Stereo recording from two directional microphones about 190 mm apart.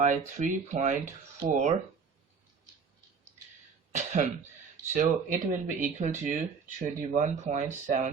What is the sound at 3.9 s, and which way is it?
Cough, 40° right (ahead or behind).